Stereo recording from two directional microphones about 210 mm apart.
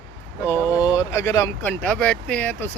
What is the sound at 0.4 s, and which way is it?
Speech, 15° left (ahead or behind).